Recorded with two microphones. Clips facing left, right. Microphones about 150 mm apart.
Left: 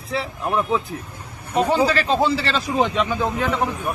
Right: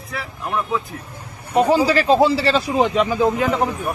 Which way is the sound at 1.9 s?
35° right (ahead or behind).